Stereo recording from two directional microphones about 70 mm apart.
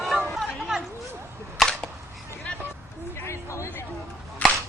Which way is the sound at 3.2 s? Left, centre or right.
Left.